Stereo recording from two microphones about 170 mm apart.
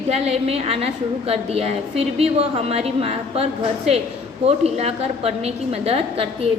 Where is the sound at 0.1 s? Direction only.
35° right (ahead or behind).